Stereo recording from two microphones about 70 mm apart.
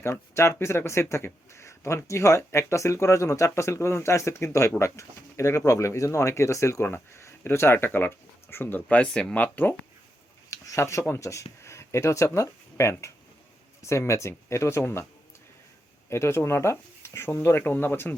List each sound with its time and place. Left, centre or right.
0.0 s speech: left
10.5 s a sound: left
11.2 s speech: left
16.0 s speech: left